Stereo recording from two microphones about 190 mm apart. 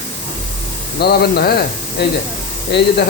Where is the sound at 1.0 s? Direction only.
55° left (ahead or behind).